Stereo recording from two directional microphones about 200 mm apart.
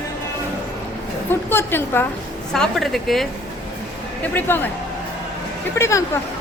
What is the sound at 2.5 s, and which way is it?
Speech, centre (ahead or behind).